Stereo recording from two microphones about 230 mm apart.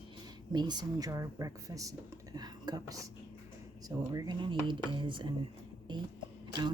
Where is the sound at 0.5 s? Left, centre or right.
Centre.